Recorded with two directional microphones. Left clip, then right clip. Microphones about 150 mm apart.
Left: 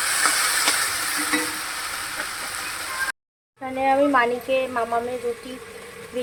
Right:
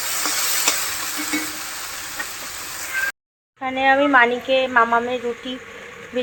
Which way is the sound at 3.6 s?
5° left (ahead or behind).